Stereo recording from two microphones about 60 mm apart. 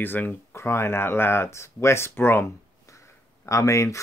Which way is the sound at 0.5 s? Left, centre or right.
Left.